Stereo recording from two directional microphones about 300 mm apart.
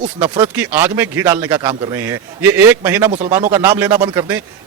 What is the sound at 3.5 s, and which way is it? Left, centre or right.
Speech, centre.